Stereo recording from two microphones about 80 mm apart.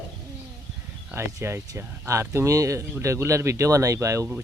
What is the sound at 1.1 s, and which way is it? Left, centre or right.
Speech, right.